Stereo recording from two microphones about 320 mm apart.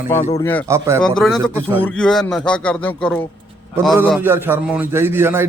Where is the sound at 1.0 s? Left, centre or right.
Centre.